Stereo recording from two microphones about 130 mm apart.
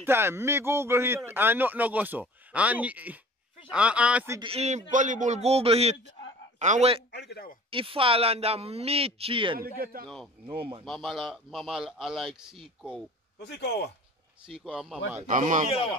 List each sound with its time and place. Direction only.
0.0 s speech: 20° right (ahead or behind)
4.4 s a man's voice: 50° right (ahead or behind)
6.6 s a man's voice: 65° right (ahead or behind)
7.7 s speech: 45° right (ahead or behind)
10.0 s a man's voice: 5° left (ahead or behind)
10.4 s speech: 45° right (ahead or behind)
10.9 s a man's voice: centre (ahead or behind)
14.4 s a man's voice: 5° right (ahead or behind)
15.2 s speech: 80° right